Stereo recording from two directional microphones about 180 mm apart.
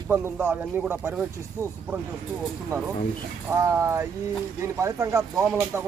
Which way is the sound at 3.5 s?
15° right (ahead or behind).